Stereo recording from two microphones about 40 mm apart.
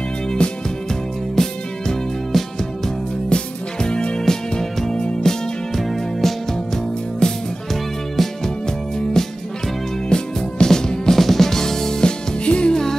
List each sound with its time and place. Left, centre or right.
0.4 s music: left
1.3 s music: centre
2.3 s music: centre
3.3 s music: left
4.2 s music: centre
5.8 s music: centre
7.2 s music: centre
8.2 s music: centre
12.0 s music: left